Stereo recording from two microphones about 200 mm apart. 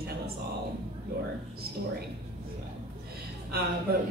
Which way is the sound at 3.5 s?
50° right (ahead or behind).